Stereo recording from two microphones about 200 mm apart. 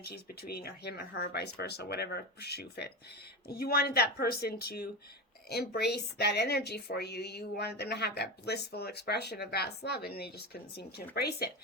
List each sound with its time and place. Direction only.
0.0 s speech: 50° left (ahead or behind)